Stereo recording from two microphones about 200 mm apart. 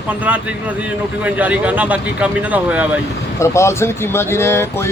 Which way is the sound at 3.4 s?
15° left (ahead or behind).